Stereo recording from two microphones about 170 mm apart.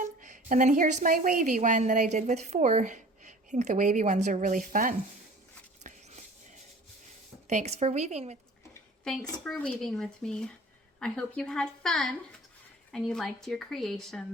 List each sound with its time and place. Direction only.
0.0 s a woman's voice: 50° right (ahead or behind)
5.8 s a sound: 45° right (ahead or behind)
7.4 s speech: 40° right (ahead or behind)
9.4 s speech: 10° left (ahead or behind)